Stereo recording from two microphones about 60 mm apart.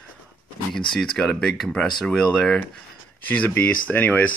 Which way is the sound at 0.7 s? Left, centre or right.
Centre.